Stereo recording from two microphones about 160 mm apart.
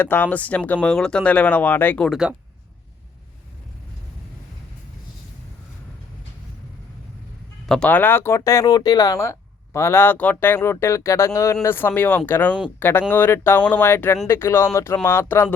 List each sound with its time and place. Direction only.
0.0 s speech: 10° left (ahead or behind)
2.0 s speech: 5° right (ahead or behind)
7.7 s speech: 10° left (ahead or behind)